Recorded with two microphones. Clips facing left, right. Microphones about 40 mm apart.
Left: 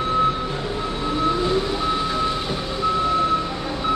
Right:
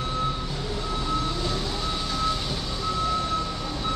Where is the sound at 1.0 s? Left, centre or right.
Left.